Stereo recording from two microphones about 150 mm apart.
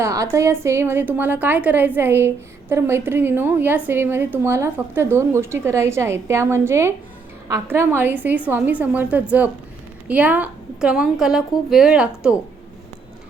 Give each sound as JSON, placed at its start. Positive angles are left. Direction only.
{"t": 0.0, "sound": "a woman's voice", "side_deg": -20}